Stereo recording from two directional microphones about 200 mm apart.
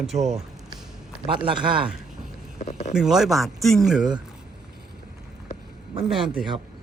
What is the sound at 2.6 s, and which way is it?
Speech, 35° left (ahead or behind).